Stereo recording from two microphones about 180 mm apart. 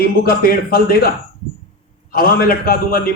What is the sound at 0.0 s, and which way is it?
Speech, 55° left (ahead or behind).